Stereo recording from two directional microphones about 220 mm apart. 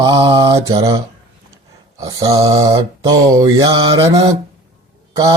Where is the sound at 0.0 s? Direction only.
20° right (ahead or behind).